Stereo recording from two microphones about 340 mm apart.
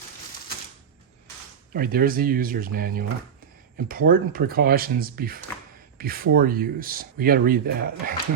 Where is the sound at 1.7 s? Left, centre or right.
Right.